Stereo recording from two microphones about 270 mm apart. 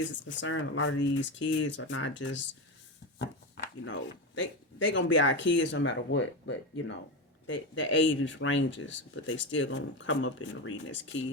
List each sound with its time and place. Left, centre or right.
0.0 s speech: left
3.8 s speech: left